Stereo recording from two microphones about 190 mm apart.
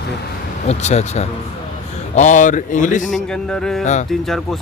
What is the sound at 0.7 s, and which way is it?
Speech, 35° left (ahead or behind).